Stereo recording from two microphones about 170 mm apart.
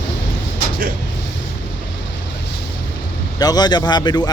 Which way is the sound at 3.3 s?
25° left (ahead or behind).